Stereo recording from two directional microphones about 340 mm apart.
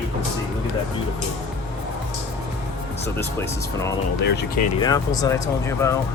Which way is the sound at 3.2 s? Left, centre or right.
Centre.